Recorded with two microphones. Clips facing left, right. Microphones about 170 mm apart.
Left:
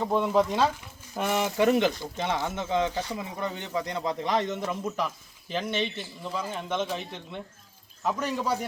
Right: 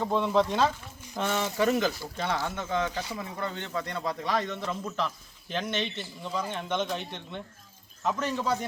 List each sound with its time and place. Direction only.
0.0 s speech: 5° left (ahead or behind)